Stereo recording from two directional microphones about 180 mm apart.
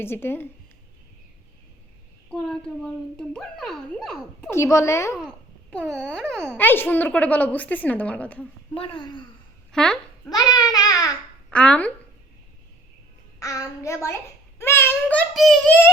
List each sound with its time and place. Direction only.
0.0 s a woman's voice: 15° left (ahead or behind)
2.3 s speech: 5° left (ahead or behind)
4.5 s a woman's voice: 15° left (ahead or behind)
5.7 s a woman's voice: centre (ahead or behind)
8.7 s a woman's voice: 30° left (ahead or behind)
9.7 s speech: 5° left (ahead or behind)
10.2 s babbling: 20° left (ahead or behind)
11.4 s speech: 5° left (ahead or behind)
13.4 s a woman's voice: 20° left (ahead or behind)
15.0 s speech: centre (ahead or behind)